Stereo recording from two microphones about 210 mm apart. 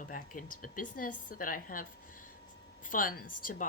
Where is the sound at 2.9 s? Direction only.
40° left (ahead or behind).